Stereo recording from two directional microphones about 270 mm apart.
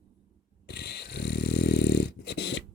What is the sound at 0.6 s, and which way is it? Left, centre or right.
Dog, left.